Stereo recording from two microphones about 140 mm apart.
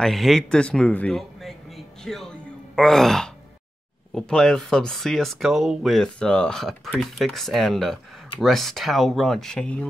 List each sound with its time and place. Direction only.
0.0 s speech: centre (ahead or behind)
2.0 s gasp: 5° left (ahead or behind)
4.1 s speech: 5° left (ahead or behind)